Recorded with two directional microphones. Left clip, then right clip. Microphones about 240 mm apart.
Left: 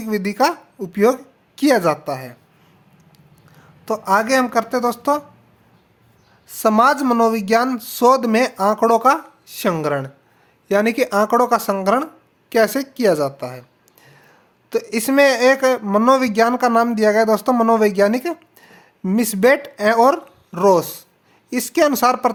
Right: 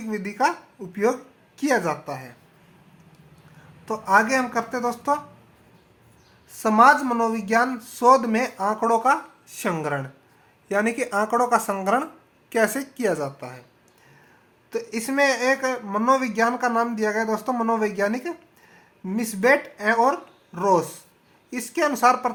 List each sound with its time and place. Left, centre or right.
0.0 s speech: left
3.8 s speech: left
6.5 s speech: left
14.7 s speech: left